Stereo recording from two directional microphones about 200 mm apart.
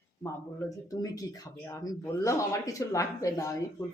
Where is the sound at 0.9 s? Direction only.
15° left (ahead or behind).